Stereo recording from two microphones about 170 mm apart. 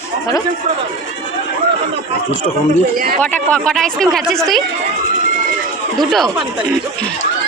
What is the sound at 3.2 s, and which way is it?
Speech, 10° left (ahead or behind).